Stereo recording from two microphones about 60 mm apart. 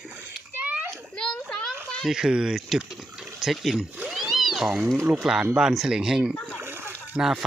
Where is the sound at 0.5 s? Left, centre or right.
Right.